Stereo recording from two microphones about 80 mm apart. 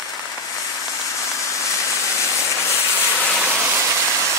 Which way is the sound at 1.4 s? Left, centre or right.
Left.